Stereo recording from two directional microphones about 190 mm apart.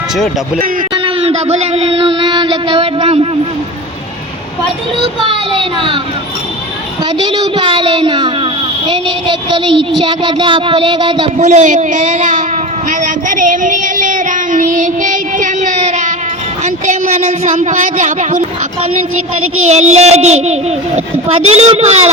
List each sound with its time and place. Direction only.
0.9 s speech: 30° right (ahead or behind)
5.2 s a sound: 25° right (ahead or behind)
7.2 s a sound: 25° right (ahead or behind)
11.3 s a child's voice: 40° right (ahead or behind)
12.9 s child singing: 40° right (ahead or behind)
16.6 s a child's voice: 40° right (ahead or behind)
19.6 s a child's voice: 35° right (ahead or behind)